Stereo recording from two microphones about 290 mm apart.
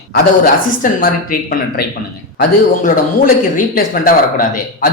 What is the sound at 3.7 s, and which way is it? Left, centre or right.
Speech, left.